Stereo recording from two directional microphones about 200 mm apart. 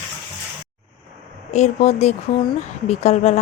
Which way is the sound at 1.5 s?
35° left (ahead or behind).